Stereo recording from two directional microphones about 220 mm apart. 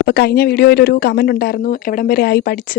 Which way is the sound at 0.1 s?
45° left (ahead or behind).